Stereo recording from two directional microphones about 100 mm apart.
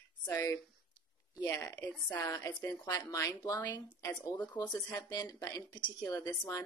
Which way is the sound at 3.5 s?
45° left (ahead or behind).